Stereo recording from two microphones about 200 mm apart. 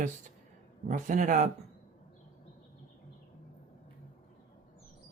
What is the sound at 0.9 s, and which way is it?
Speech, 40° right (ahead or behind).